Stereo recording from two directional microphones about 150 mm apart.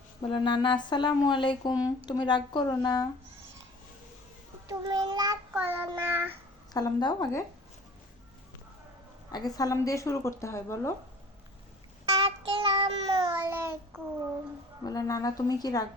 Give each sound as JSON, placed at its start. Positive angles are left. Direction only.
{"t": 0.2, "sound": "a woman's voice", "side_deg": 30}
{"t": 1.7, "sound": "speech", "side_deg": -10}
{"t": 2.0, "sound": "a woman's voice", "side_deg": 30}
{"t": 4.7, "sound": "child singing", "side_deg": -30}
{"t": 5.6, "sound": "speech", "side_deg": -15}
{"t": 6.0, "sound": "child singing", "side_deg": -15}
{"t": 6.7, "sound": "a woman's voice", "side_deg": 25}
{"t": 9.3, "sound": "a woman's voice", "side_deg": 25}
{"t": 12.0, "sound": "child singing", "side_deg": -40}
{"t": 13.5, "sound": "child singing", "side_deg": -15}
{"t": 14.8, "sound": "a woman's voice", "side_deg": 25}